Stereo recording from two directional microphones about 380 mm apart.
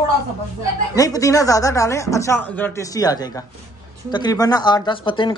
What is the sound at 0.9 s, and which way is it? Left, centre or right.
Speech, centre.